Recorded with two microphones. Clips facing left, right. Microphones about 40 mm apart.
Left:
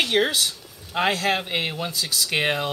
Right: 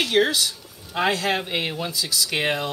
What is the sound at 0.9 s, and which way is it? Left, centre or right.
Speech, centre.